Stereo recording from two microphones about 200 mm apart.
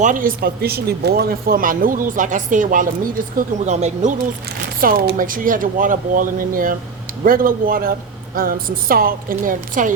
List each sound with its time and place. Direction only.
0.0 s speech: 40° right (ahead or behind)
4.8 s speech: 45° right (ahead or behind)